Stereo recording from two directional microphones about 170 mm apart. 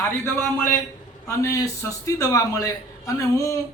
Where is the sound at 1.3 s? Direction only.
15° left (ahead or behind).